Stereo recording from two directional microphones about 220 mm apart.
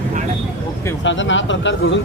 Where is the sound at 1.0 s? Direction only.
55° left (ahead or behind).